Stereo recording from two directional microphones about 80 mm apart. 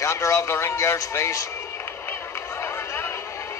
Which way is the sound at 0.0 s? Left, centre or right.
Left.